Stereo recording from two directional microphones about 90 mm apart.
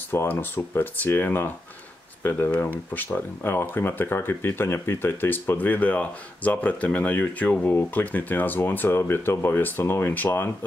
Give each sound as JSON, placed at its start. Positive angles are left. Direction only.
{"t": 0.1, "sound": "speech", "side_deg": 25}